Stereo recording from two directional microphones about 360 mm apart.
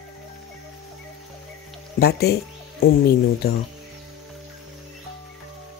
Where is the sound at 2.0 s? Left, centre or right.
Left.